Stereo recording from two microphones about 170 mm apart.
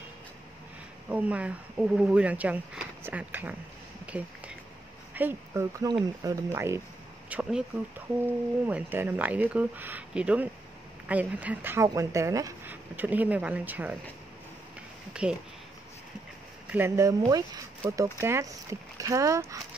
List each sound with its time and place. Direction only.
1.0 s speech: 10° right (ahead or behind)
4.0 s a sound: 10° right (ahead or behind)
5.1 s speech: 15° right (ahead or behind)
8.6 s speech: 10° right (ahead or behind)
15.2 s speech: 5° right (ahead or behind)
16.6 s speech: 10° right (ahead or behind)